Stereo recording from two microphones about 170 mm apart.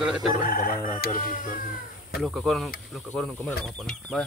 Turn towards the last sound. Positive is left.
turn(degrees=5)  # may be behind; listen again after turning